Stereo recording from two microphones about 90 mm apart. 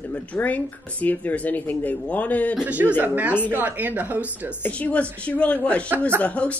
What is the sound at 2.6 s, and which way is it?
A man's voice, 15° right (ahead or behind).